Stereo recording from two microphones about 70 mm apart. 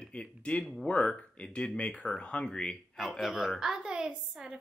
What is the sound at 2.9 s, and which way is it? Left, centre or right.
A woman's voice, centre.